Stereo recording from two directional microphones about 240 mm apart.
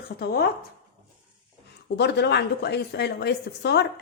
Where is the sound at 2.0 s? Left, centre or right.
Left.